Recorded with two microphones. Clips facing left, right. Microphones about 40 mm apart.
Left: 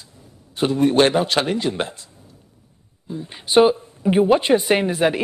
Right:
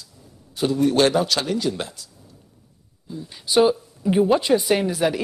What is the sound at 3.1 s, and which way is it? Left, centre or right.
Speech, left.